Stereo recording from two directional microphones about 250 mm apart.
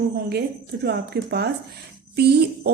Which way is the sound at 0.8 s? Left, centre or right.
Right.